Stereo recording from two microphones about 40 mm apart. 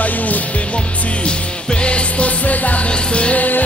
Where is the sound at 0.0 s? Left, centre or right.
Left.